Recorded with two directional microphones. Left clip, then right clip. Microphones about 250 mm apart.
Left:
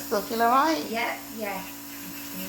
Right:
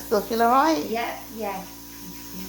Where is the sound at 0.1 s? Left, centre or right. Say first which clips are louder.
Right 3 dB; centre.